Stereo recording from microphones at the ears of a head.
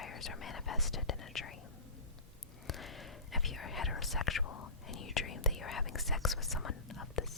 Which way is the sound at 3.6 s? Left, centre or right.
Left.